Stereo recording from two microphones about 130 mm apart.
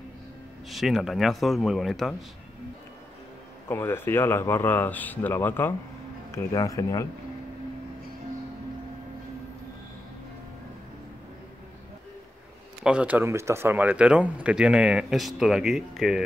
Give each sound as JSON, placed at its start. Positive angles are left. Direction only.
{"t": 0.7, "sound": "speech", "side_deg": 0}
{"t": 3.6, "sound": "a man's voice", "side_deg": 15}
{"t": 12.8, "sound": "speech", "side_deg": -10}